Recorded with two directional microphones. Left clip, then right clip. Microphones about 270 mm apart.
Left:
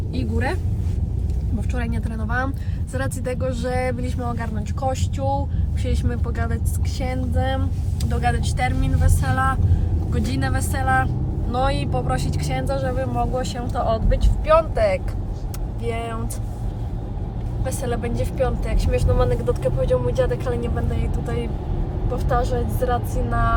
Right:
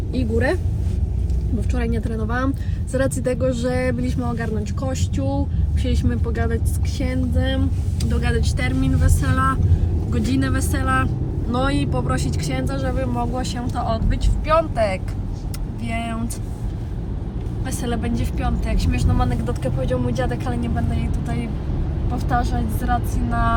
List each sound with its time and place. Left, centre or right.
0.1 s vehicle: centre
1.7 s speech: centre
17.7 s speech: centre
22.1 s speech: centre